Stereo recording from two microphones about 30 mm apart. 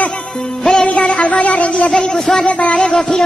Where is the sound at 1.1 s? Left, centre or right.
Left.